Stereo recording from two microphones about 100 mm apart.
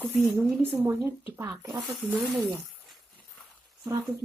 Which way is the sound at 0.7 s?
25° right (ahead or behind).